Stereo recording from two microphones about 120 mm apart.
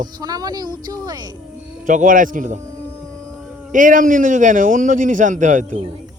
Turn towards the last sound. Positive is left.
turn(degrees=-90)